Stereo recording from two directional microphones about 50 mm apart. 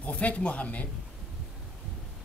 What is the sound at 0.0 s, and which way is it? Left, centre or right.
Speech, left.